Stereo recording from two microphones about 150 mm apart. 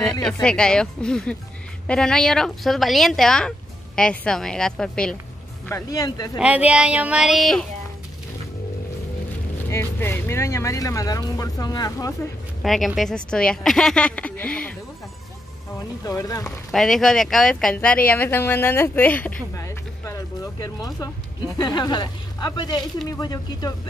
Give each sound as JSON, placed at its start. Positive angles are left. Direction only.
{"t": 0.2, "sound": "a woman's voice", "side_deg": 5}
{"t": 5.7, "sound": "speech", "side_deg": 20}
{"t": 6.3, "sound": "speech", "side_deg": -10}
{"t": 9.7, "sound": "speech", "side_deg": 15}
{"t": 12.6, "sound": "a woman's voice", "side_deg": 0}
{"t": 16.0, "sound": "speech", "side_deg": 20}
{"t": 16.4, "sound": "speech", "side_deg": 5}
{"t": 19.5, "sound": "music", "side_deg": 20}
{"t": 21.5, "sound": "speech", "side_deg": 25}